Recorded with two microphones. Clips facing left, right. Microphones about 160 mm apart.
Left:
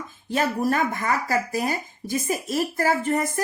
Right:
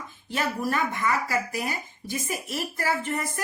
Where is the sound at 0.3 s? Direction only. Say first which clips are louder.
Left 5 dB; 40° left (ahead or behind).